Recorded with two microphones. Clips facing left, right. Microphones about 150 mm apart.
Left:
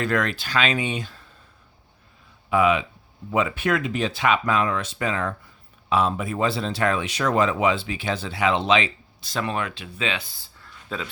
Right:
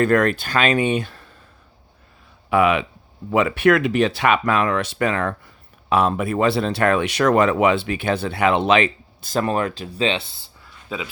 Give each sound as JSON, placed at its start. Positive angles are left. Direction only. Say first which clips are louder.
{"t": 0.0, "sound": "speech", "louder": "right 7 dB", "side_deg": -50}
{"t": 2.5, "sound": "speech", "louder": "right 3 dB", "side_deg": -65}
{"t": 10.8, "sound": "speech", "louder": "right 2 dB", "side_deg": -5}